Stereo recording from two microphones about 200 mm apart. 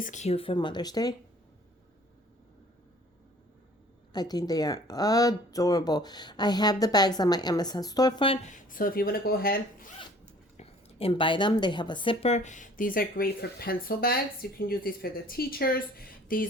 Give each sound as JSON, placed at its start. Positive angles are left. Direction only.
{"t": 0.0, "sound": "speech", "side_deg": 35}
{"t": 4.1, "sound": "speech", "side_deg": 20}
{"t": 8.4, "sound": "a woman's voice", "side_deg": 40}
{"t": 10.6, "sound": "a woman's voice", "side_deg": 30}